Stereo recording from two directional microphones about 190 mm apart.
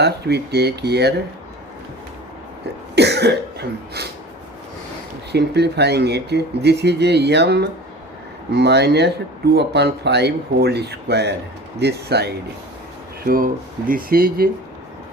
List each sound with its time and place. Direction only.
0.0 s speech: 60° right (ahead or behind)
2.9 s cough: 60° right (ahead or behind)
5.3 s speech: 60° right (ahead or behind)
13.2 s speech: 45° right (ahead or behind)